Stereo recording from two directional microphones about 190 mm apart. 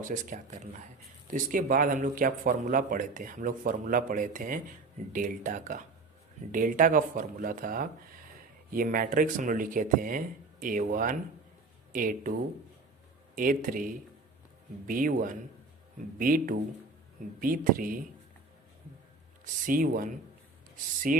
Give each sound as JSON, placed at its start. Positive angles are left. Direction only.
{"t": 0.0, "sound": "a man's voice", "side_deg": -45}
{"t": 13.3, "sound": "a man's voice", "side_deg": -45}
{"t": 19.6, "sound": "a man's voice", "side_deg": -45}
{"t": 21.1, "sound": "a man's voice", "side_deg": -45}